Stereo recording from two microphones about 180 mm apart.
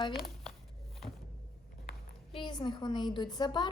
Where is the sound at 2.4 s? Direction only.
25° left (ahead or behind).